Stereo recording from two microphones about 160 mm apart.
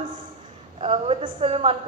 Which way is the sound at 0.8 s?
40° right (ahead or behind).